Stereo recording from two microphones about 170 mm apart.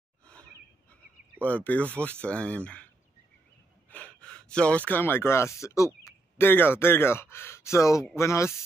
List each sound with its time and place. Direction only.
1.4 s speech: 10° left (ahead or behind)
3.9 s speech: 5° left (ahead or behind)